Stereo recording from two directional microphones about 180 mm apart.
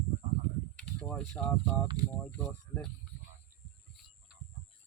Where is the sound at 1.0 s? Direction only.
5° left (ahead or behind).